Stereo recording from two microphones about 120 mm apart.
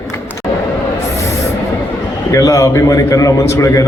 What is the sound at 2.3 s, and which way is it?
A man's voice, 30° left (ahead or behind).